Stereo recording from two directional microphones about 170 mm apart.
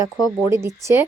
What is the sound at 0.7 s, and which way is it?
Speech, 15° right (ahead or behind).